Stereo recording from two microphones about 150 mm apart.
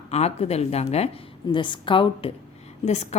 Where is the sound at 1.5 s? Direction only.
30° left (ahead or behind).